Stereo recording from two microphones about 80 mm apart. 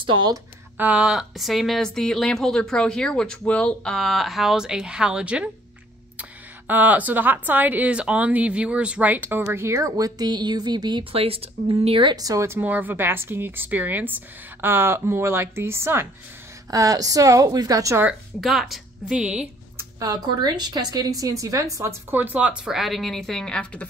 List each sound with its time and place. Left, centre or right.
0.7 s speech: centre
6.7 s speech: centre; by 11.1 s right
11.9 s speech: right
12.2 s a woman's voice: right
12.4 s speech: right
16.7 s a woman's voice: right
18.4 s a woman's voice: centre
19.1 s speech: centre
20.0 s a woman's voice: right
22.1 s speech: right
22.7 s speech: centre